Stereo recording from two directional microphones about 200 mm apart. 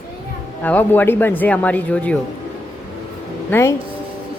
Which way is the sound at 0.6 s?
10° left (ahead or behind).